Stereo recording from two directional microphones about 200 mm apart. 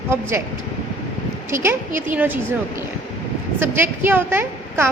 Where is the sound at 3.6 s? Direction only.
10° right (ahead or behind).